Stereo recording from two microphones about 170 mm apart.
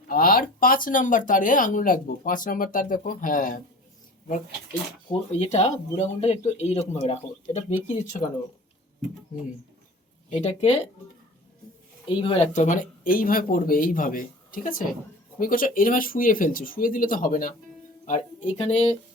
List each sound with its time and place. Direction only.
0.1 s speech: 55° left (ahead or behind)
5.4 s speech: 40° left (ahead or behind)
10.3 s speech: 40° left (ahead or behind)
12.0 s speech: 30° left (ahead or behind)
12.5 s speech: 45° left (ahead or behind)
18.0 s speech: 40° left (ahead or behind)